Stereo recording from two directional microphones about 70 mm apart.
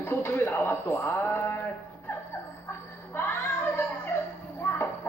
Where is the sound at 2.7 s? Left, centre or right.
Left.